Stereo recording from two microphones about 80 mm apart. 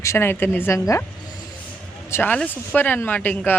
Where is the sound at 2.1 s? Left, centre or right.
Left.